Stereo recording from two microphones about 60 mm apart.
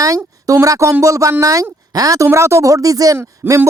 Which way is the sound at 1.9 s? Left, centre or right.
Right.